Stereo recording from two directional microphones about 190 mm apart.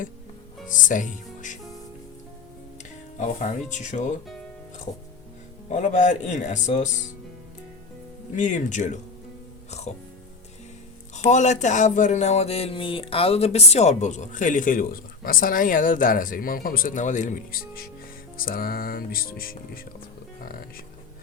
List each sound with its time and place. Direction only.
0.7 s speech: 45° left (ahead or behind)
3.2 s speech: 40° left (ahead or behind)
5.7 s speech: 40° left (ahead or behind)
8.4 s speech: 40° left (ahead or behind)
9.6 s music: 35° left (ahead or behind)
11.3 s speech: 40° left (ahead or behind)
18.3 s music: 50° left (ahead or behind)